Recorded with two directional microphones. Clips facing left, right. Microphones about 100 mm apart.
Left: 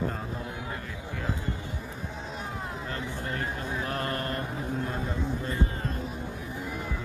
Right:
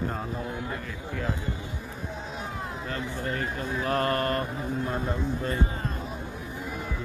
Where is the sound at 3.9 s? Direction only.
85° right; by 4.4 s 65° right (ahead or behind).